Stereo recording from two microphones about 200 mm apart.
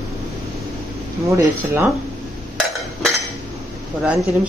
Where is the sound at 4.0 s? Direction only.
5° right (ahead or behind).